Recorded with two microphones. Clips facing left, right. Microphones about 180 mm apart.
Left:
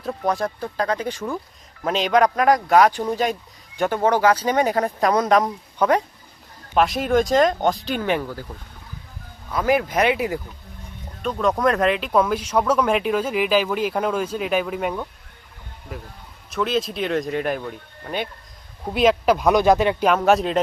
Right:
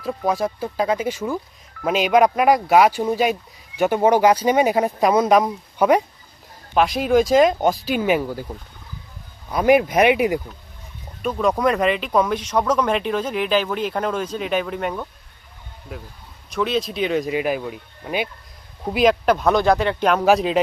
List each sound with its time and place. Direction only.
0.0 s speech: 5° right (ahead or behind)
6.7 s speech: centre (ahead or behind)
9.5 s speech: 20° right (ahead or behind)
11.2 s speech: 5° right (ahead or behind)
16.5 s speech: centre (ahead or behind); by 20.0 s 15° left (ahead or behind)
20.0 s speech: 5° left (ahead or behind)